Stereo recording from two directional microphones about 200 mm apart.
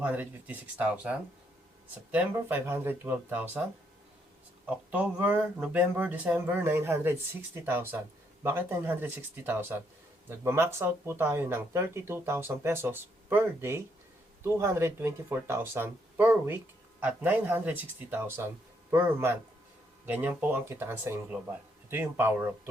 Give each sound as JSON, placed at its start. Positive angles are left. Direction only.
{"t": 0.0, "sound": "speech", "side_deg": -10}
{"t": 2.1, "sound": "speech", "side_deg": -10}
{"t": 4.7, "sound": "speech", "side_deg": -5}